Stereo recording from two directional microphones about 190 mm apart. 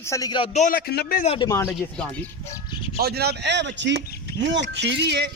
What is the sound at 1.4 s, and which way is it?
Speech, 15° left (ahead or behind).